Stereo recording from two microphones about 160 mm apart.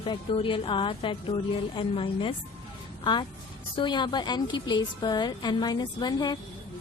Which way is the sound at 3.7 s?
30° left (ahead or behind).